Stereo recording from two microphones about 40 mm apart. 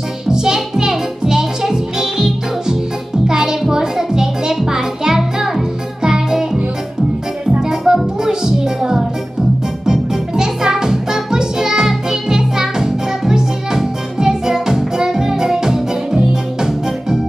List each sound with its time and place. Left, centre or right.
0.3 s music: centre
7.6 s music: centre